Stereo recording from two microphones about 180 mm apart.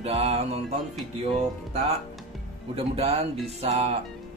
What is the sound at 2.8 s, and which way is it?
Speech, 35° right (ahead or behind).